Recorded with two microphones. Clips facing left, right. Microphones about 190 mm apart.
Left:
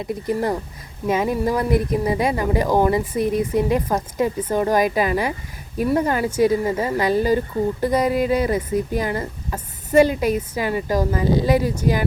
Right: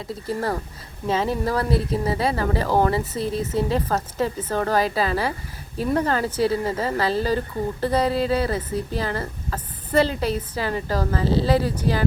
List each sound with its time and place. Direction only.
0.0 s speech: 15° left (ahead or behind)